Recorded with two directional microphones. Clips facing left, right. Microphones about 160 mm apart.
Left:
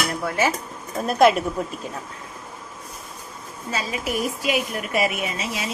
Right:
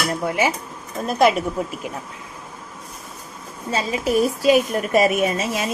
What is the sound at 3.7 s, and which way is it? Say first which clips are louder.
A woman's voice: right 5 dB; 30° right (ahead or behind).